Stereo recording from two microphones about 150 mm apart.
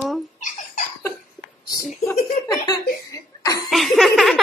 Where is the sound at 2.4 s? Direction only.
20° left (ahead or behind).